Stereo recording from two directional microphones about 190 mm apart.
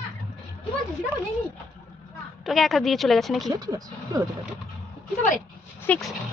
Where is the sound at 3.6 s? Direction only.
20° right (ahead or behind).